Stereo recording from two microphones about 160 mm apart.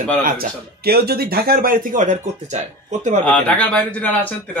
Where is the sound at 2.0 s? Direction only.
45° right (ahead or behind).